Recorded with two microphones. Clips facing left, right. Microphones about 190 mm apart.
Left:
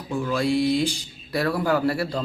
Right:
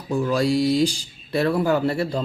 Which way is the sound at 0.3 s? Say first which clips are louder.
Right 1 dB; 35° right (ahead or behind).